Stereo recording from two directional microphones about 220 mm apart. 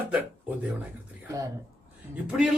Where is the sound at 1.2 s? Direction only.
15° right (ahead or behind).